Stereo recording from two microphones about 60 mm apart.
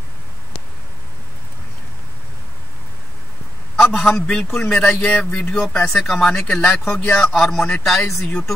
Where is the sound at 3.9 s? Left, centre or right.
Centre.